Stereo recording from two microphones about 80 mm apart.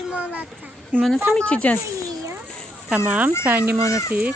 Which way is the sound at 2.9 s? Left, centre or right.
Centre.